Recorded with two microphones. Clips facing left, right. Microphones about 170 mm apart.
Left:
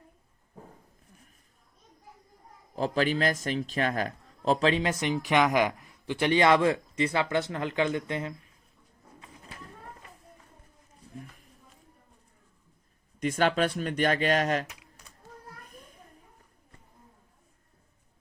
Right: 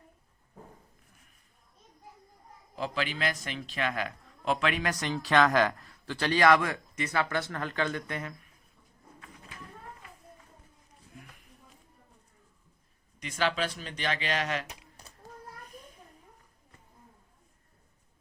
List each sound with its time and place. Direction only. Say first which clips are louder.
2.7 s a man's voice: left 7 dB; 40° left (ahead or behind); by 8.3 s 20° left (ahead or behind)
13.1 s speech: left 5 dB; 50° left (ahead or behind)